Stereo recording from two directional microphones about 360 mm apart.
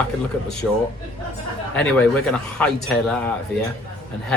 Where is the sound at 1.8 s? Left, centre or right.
Centre.